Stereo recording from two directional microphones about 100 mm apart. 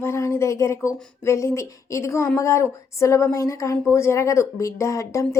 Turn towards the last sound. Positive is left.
turn(degrees=30)  # may be behind; listen again after turning